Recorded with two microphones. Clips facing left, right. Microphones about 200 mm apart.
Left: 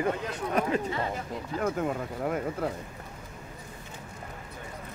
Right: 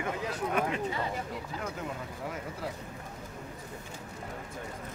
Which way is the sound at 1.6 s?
55° left (ahead or behind).